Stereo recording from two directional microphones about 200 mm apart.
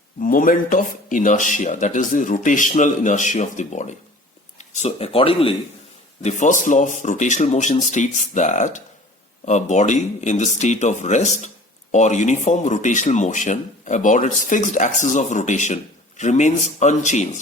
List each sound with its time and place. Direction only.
0.2 s speech: 45° left (ahead or behind)